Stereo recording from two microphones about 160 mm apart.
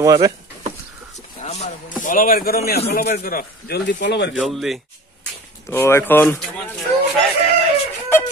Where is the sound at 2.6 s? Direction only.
80° left.